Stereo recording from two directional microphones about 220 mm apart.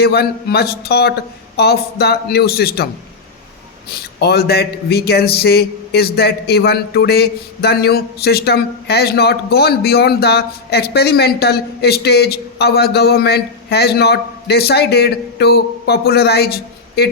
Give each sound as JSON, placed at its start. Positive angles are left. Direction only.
{"t": 0.0, "sound": "a man's voice", "side_deg": 45}
{"t": 3.9, "sound": "a man's voice", "side_deg": 45}